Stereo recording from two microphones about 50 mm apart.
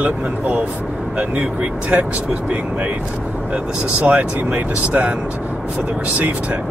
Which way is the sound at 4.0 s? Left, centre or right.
Right.